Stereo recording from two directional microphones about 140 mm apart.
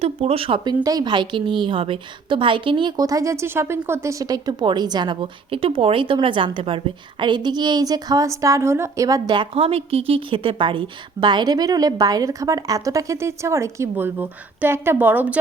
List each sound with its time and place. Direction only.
0.0 s a woman's voice: 45° right (ahead or behind); by 15.4 s 10° right (ahead or behind)